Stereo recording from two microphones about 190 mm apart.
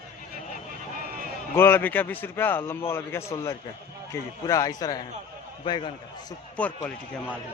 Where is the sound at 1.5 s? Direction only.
10° left (ahead or behind).